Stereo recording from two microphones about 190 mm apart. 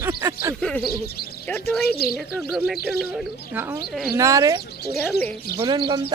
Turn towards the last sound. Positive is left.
turn(degrees=-25)  # may be behind; listen again after turning